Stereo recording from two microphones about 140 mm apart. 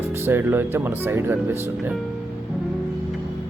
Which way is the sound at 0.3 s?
15° right (ahead or behind).